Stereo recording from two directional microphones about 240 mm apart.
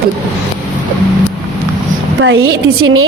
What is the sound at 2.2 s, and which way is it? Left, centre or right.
Speech, right.